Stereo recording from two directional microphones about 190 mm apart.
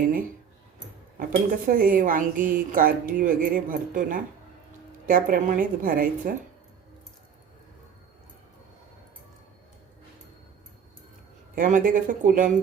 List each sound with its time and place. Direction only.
0.0 s speech: 50° right (ahead or behind)
1.6 s speech: 45° right (ahead or behind)
11.5 s speech: 45° right (ahead or behind)